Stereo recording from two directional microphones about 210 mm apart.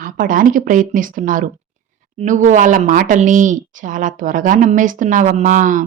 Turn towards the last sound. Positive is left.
turn(degrees=-35)  # may be behind; listen again after turning